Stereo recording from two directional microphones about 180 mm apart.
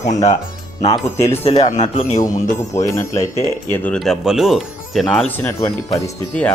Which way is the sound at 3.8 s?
5° left (ahead or behind).